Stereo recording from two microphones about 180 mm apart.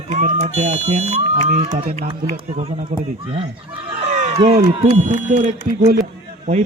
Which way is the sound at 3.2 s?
30° right (ahead or behind).